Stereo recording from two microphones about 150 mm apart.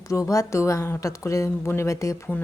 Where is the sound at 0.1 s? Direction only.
20° left (ahead or behind).